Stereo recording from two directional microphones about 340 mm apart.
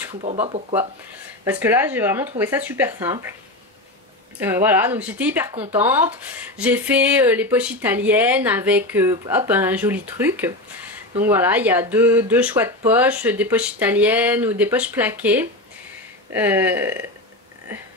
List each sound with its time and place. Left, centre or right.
0.1 s speech: centre
1.4 s speech: centre
4.4 s speech: centre